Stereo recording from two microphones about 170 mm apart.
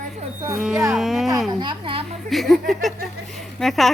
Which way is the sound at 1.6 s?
30° right (ahead or behind).